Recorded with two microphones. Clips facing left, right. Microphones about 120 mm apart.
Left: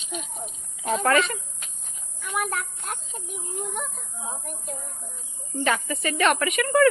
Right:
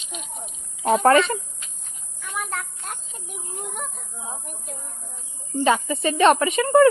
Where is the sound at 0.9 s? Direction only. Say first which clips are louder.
Right 5 dB; 30° right (ahead or behind).